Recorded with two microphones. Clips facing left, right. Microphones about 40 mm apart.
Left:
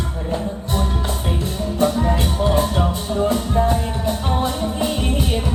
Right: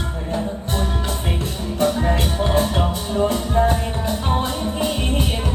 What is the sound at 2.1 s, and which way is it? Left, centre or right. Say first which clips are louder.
Music: left 1 dB; right.